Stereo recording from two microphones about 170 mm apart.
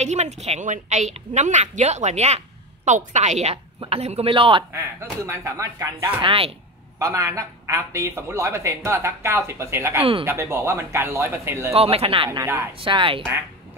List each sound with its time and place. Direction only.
0.0 s a woman's voice: 40° right (ahead or behind)
5.2 s speech: 15° right (ahead or behind)
6.2 s a man's voice: 30° right (ahead or behind)
7.0 s speech: 20° right (ahead or behind)
11.7 s a man's voice: 35° right (ahead or behind)
12.3 s speech: 15° right (ahead or behind)
12.8 s a man's voice: 30° right (ahead or behind)